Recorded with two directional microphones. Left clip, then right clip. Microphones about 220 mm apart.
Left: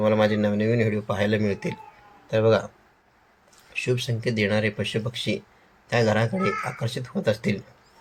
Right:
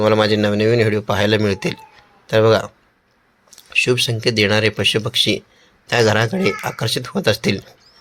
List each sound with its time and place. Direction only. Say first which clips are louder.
0.0 s speech: right 6 dB; 45° right (ahead or behind)